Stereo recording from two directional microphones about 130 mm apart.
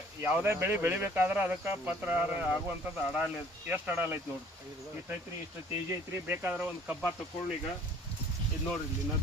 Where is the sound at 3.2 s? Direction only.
15° right (ahead or behind).